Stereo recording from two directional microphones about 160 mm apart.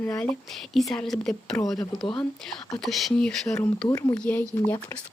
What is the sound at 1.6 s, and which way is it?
Speech, 20° left (ahead or behind).